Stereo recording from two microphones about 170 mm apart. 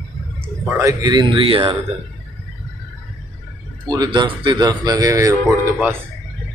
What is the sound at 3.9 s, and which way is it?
A man's voice, 25° right (ahead or behind).